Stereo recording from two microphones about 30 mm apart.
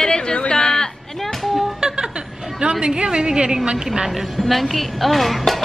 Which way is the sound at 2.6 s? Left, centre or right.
Right.